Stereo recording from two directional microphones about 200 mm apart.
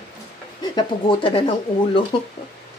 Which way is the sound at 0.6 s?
25° left (ahead or behind).